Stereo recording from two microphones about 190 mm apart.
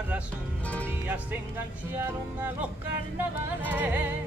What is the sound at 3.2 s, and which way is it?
Music, 10° right (ahead or behind).